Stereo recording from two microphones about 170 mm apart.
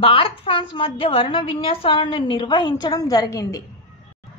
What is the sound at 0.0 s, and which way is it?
A woman's voice, 30° left (ahead or behind).